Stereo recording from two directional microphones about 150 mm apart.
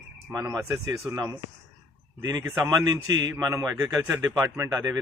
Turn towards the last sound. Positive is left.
turn(degrees=-20)  # may be behind; listen again after turning